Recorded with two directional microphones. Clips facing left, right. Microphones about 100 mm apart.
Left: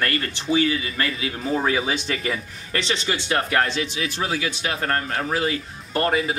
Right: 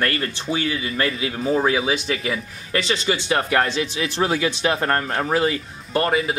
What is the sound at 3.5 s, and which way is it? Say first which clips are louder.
Speech: right 2 dB; 25° right (ahead or behind).